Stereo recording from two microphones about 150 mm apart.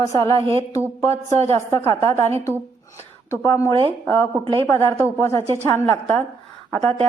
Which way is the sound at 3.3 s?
20° left (ahead or behind).